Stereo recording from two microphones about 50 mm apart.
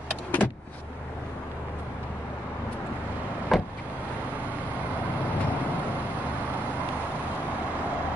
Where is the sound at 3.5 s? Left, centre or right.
Centre.